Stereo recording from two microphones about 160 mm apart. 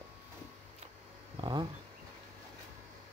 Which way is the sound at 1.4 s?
35° right (ahead or behind).